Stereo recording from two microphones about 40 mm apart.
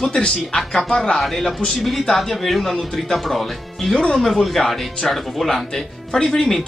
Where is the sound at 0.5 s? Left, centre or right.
Centre.